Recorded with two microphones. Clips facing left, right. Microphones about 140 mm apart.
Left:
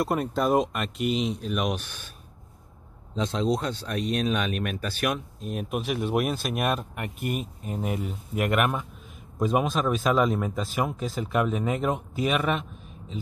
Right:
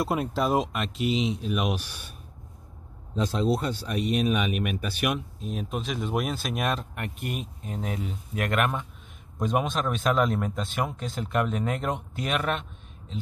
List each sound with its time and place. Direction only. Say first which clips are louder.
0.0 s speech: left 1 dB; centre (ahead or behind)
3.2 s speech: even; 5° right (ahead or behind)